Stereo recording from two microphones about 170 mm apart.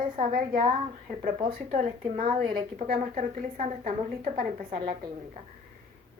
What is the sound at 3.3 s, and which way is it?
A woman's voice, 50° right (ahead or behind).